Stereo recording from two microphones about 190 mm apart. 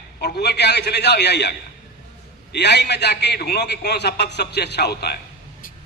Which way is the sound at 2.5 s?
65° left (ahead or behind).